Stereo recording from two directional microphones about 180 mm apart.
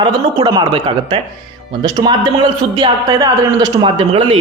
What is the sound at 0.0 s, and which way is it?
A woman's voice, 25° right (ahead or behind).